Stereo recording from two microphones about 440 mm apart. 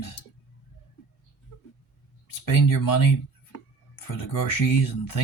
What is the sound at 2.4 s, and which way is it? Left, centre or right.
Speech, left.